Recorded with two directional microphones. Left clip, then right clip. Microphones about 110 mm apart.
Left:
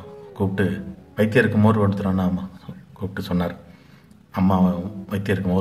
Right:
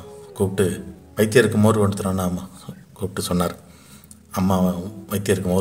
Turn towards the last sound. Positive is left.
turn(degrees=-30)  # may be behind; listen again after turning